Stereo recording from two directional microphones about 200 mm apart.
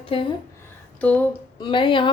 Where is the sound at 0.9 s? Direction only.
5° left (ahead or behind).